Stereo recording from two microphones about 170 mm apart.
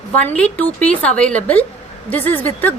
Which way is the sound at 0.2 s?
10° left (ahead or behind).